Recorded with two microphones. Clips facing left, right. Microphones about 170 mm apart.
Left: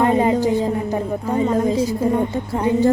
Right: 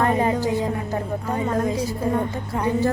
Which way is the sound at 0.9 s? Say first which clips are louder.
Left 4 dB; 15° left (ahead or behind).